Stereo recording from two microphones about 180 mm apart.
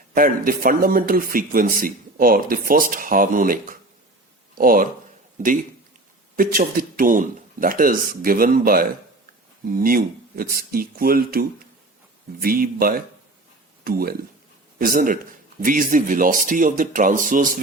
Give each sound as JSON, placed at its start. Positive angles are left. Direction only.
{"t": 0.1, "sound": "speech", "side_deg": -50}
{"t": 6.3, "sound": "speech", "side_deg": -50}